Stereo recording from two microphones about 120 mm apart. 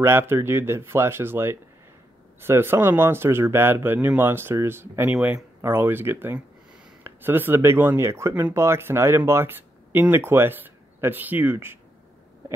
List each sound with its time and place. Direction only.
0.0 s speech: 20° right (ahead or behind)